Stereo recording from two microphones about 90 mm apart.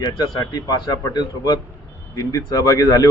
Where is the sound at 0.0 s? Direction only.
45° left (ahead or behind).